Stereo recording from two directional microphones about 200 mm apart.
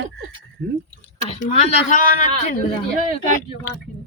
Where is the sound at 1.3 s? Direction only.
40° left (ahead or behind).